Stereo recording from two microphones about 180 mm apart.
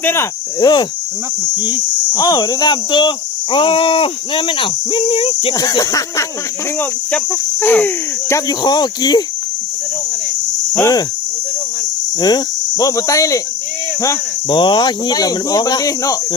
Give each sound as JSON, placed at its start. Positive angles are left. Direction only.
{"t": 0.0, "sound": "speech", "side_deg": 15}
{"t": 2.1, "sound": "speech", "side_deg": 20}
{"t": 6.7, "sound": "cricket", "side_deg": 10}
{"t": 10.8, "sound": "speech", "side_deg": 20}
{"t": 12.2, "sound": "speech", "side_deg": 20}